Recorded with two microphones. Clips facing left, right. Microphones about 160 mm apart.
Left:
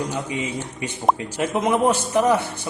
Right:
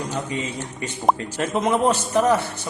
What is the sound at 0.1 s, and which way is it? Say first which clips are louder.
A man's voice: left 1 dB; 10° left (ahead or behind).